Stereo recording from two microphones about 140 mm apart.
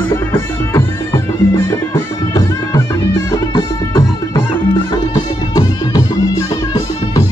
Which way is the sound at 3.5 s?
25° left (ahead or behind).